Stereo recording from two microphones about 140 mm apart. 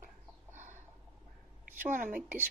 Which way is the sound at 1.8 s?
70° right (ahead or behind).